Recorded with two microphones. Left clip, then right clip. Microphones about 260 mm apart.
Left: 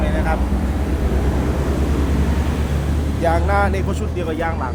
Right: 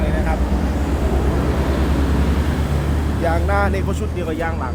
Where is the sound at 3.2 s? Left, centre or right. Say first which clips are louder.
Left 2 dB; centre.